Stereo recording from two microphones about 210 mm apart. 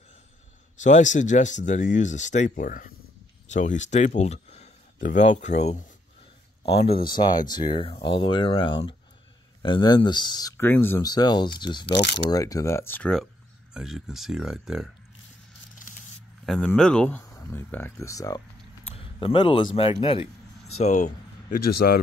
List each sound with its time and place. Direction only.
0.7 s speech: 35° left (ahead or behind)
7.1 s speech: 20° left (ahead or behind); by 14.9 s centre (ahead or behind)
16.4 s speech: 5° left (ahead or behind); by 22.0 s 45° left (ahead or behind)